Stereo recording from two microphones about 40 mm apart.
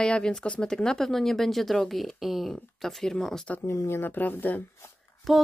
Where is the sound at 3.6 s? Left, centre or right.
Left.